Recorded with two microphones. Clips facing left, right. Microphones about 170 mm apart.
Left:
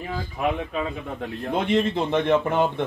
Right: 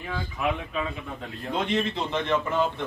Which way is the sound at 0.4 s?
45° left (ahead or behind).